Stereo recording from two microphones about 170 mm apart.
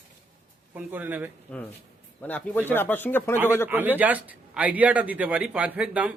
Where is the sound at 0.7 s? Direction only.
10° right (ahead or behind).